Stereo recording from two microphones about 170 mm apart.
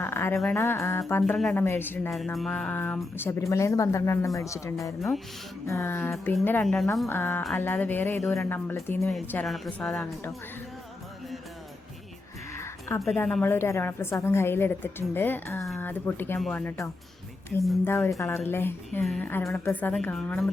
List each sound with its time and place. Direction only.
0.0 s a sound: 10° left (ahead or behind)
0.5 s a woman's voice: 15° left (ahead or behind)
2.0 s music: centre (ahead or behind)
3.2 s a woman's voice: 15° left (ahead or behind)
6.1 s music: centre (ahead or behind)
6.4 s a woman's voice: 10° left (ahead or behind)
9.5 s music: 5° left (ahead or behind)
12.5 s music: 15° left (ahead or behind)
13.0 s a woman's voice: 5° left (ahead or behind)
16.4 s music: 5° left (ahead or behind)
17.8 s a woman's voice: 15° left (ahead or behind)